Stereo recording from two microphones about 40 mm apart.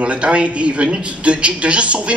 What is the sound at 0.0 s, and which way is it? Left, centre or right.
A man's voice, right.